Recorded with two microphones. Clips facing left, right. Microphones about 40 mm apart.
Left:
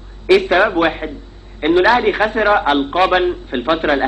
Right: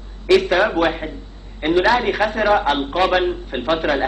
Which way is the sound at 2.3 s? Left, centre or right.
Left.